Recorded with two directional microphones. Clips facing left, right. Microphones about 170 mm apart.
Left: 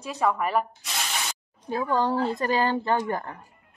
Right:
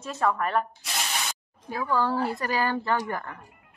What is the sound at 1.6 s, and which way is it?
A woman's voice, 25° left (ahead or behind).